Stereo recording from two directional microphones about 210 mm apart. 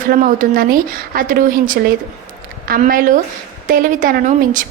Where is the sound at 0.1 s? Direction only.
40° right (ahead or behind).